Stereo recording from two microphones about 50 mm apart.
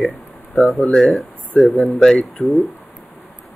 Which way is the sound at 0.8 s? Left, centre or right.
Centre.